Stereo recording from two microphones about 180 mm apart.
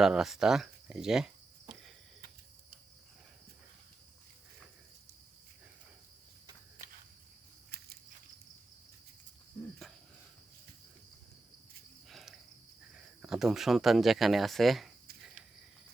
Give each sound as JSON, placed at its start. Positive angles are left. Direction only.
{"t": 0.0, "sound": "speech", "side_deg": 0}
{"t": 7.7, "sound": "a sound", "side_deg": -60}
{"t": 12.0, "sound": "cricket", "side_deg": 0}
{"t": 13.2, "sound": "speech", "side_deg": 0}